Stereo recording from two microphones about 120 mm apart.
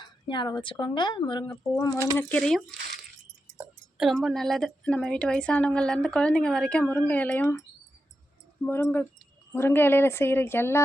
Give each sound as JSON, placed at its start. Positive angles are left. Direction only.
{"t": 0.0, "sound": "a woman's voice", "side_deg": 40}
{"t": 1.7, "sound": "a woman's voice", "side_deg": 25}
{"t": 2.4, "sound": "speech", "side_deg": 5}
{"t": 3.9, "sound": "a woman's voice", "side_deg": 0}
{"t": 8.6, "sound": "a woman's voice", "side_deg": 20}